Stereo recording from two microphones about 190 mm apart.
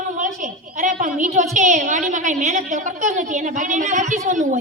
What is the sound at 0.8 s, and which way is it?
A woman's voice, 45° right (ahead or behind).